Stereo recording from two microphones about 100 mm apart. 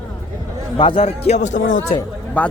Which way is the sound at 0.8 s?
60° left (ahead or behind).